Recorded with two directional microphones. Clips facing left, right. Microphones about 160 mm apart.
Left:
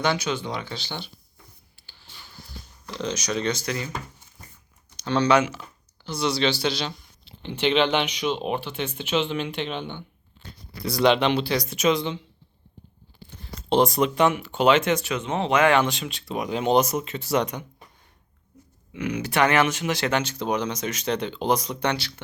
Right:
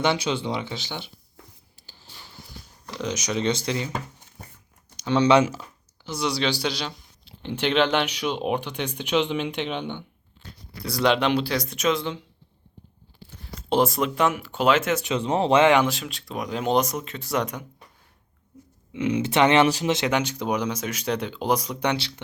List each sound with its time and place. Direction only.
0.0 s speech: 25° right (ahead or behind)
2.9 s speech: 15° right (ahead or behind)
5.0 s speech: 20° right (ahead or behind)
5.4 s speech: 35° right (ahead or behind)
6.1 s speech: 10° right (ahead or behind)
11.0 s speech: centre (ahead or behind)
13.3 s speech: 5° right (ahead or behind)
15.2 s speech: 35° right (ahead or behind)
15.9 s speech: centre (ahead or behind)
18.9 s speech: 25° right (ahead or behind)
20.0 s speech: 15° right (ahead or behind)